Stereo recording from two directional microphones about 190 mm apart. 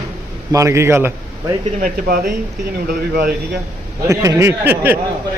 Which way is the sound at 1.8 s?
45° right (ahead or behind).